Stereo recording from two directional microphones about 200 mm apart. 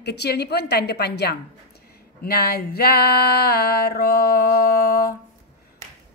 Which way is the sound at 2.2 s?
50° left (ahead or behind).